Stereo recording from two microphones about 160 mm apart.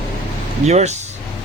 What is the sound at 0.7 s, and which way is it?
Speech, 45° right (ahead or behind).